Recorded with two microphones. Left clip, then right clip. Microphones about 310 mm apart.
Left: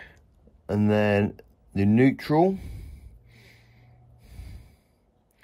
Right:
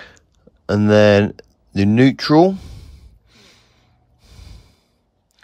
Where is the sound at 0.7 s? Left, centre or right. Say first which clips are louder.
Right 11 dB; right.